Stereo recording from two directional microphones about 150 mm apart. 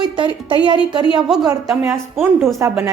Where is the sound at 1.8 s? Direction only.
15° right (ahead or behind).